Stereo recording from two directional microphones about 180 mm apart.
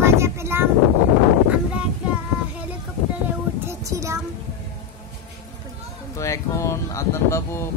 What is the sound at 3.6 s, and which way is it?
Child singing, 15° right (ahead or behind).